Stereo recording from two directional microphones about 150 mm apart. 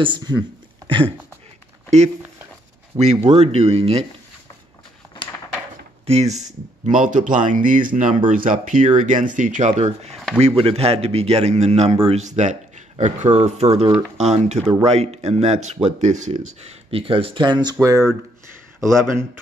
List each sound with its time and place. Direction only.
0.0 s speech: 30° right (ahead or behind)
3.3 s a man's voice: 45° right (ahead or behind)
6.0 s a man's voice: 45° right (ahead or behind)
16.6 s speech: 40° right (ahead or behind); by 19.2 s 20° right (ahead or behind)